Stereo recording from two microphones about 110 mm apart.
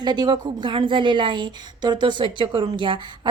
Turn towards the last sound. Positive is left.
turn(degrees=-45)  # may be behind; listen again after turning